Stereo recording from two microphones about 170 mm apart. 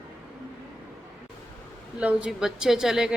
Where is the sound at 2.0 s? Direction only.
5° right (ahead or behind).